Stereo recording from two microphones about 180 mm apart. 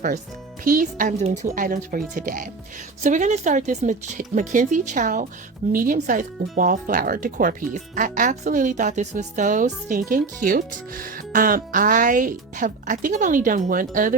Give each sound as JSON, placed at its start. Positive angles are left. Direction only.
{"t": 0.6, "sound": "speech", "side_deg": -50}